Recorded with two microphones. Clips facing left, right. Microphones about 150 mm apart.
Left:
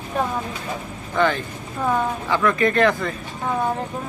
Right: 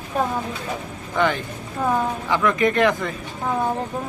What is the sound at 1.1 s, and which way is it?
Speech, 15° right (ahead or behind).